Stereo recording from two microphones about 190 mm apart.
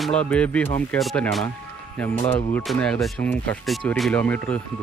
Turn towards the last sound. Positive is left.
turn(degrees=10)  # may be behind; listen again after turning